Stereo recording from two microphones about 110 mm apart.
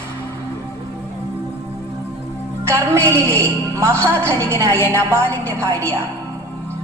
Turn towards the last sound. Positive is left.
turn(degrees=-25)  # may be behind; listen again after turning